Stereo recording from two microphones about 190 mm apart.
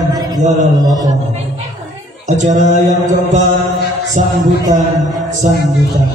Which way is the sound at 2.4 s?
40° right (ahead or behind).